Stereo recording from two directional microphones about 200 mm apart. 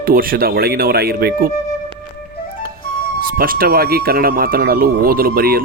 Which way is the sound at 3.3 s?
45° right (ahead or behind).